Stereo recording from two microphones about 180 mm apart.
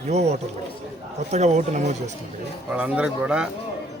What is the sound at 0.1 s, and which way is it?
Speech, 35° right (ahead or behind).